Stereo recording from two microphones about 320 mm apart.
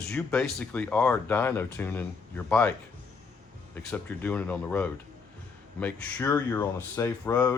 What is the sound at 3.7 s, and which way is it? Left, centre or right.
Speech, centre.